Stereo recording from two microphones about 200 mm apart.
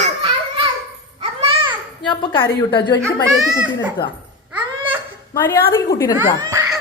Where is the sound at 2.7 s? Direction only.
20° left (ahead or behind).